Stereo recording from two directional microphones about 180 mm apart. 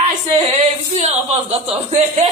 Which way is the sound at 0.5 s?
35° right (ahead or behind).